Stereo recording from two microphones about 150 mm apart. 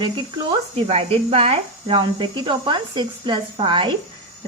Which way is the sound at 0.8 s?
40° right (ahead or behind).